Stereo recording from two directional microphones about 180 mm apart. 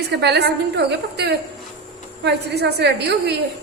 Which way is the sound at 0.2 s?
70° right (ahead or behind).